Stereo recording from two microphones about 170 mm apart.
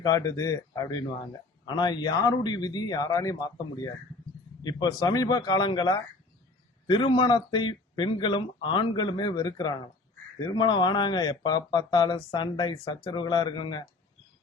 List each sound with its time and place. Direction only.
0.0 s speech: 20° left (ahead or behind)